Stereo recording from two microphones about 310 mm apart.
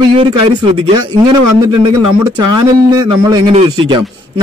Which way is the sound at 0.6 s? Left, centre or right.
Centre.